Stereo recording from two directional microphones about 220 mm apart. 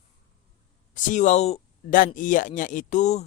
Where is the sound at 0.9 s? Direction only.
35° left (ahead or behind).